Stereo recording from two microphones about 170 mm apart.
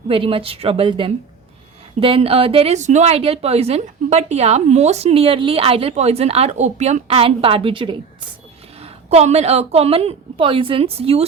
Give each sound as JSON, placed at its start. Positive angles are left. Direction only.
{"t": 0.1, "sound": "a woman's voice", "side_deg": -30}